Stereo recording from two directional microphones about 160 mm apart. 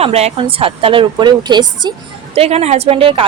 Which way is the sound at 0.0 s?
40° right (ahead or behind).